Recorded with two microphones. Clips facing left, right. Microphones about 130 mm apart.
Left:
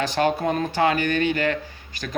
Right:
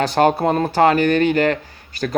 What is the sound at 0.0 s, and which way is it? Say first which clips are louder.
Speech: right 6 dB; 45° right (ahead or behind).